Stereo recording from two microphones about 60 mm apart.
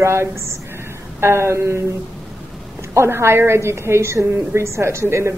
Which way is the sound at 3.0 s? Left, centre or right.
Right.